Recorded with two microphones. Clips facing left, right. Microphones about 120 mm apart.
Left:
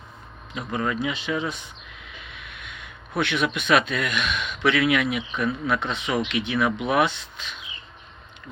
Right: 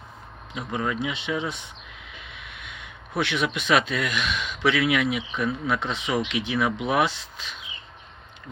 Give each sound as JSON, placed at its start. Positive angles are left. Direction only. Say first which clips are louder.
{"t": 0.5, "sound": "speech", "louder": "left 1 dB", "side_deg": -10}
{"t": 0.9, "sound": "speech", "louder": "left 1 dB", "side_deg": -25}
{"t": 3.2, "sound": "speech", "louder": "left 1 dB", "side_deg": -25}